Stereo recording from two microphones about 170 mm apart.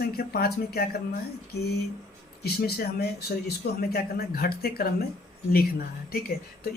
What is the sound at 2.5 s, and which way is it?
Speech, 65° left (ahead or behind).